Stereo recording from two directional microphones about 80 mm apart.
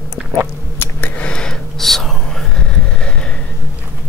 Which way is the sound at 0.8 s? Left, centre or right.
Left.